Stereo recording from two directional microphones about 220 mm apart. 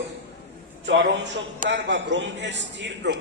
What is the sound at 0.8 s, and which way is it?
A man's voice, 55° right (ahead or behind).